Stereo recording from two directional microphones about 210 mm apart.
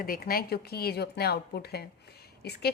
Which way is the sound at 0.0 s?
45° left (ahead or behind).